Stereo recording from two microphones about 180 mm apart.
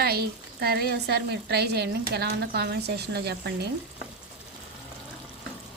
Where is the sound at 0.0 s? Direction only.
60° right (ahead or behind).